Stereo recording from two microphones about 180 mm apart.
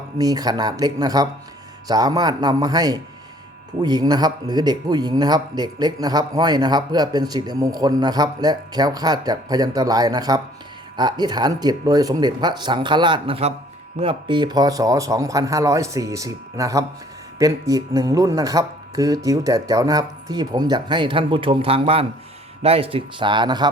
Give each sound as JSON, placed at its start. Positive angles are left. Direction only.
{"t": 0.2, "sound": "a man's voice", "side_deg": -20}